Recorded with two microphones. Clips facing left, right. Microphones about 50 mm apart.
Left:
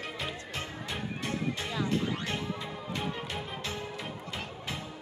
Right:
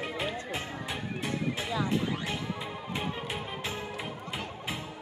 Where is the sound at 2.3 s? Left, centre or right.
Centre.